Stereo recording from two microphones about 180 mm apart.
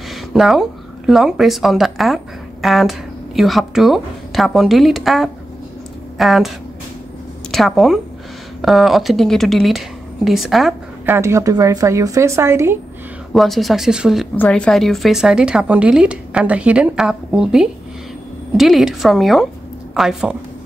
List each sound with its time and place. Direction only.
0.1 s speech: centre (ahead or behind)
7.5 s speech: centre (ahead or behind)
11.1 s speech: 15° right (ahead or behind)
13.3 s speech: centre (ahead or behind)
14.3 s speech: 10° left (ahead or behind)